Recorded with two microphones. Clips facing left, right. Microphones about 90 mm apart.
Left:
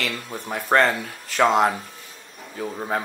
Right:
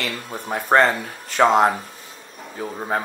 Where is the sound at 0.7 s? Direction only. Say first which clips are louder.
Right 2 dB; 15° right (ahead or behind).